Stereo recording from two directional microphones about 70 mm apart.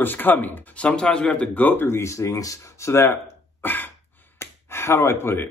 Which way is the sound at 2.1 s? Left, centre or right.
Left.